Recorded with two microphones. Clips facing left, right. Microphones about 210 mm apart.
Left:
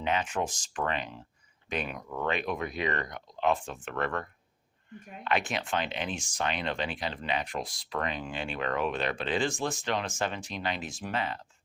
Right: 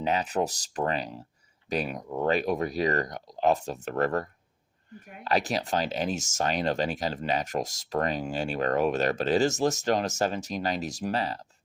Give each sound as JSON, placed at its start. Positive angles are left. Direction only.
{"t": 0.0, "sound": "speech", "side_deg": -40}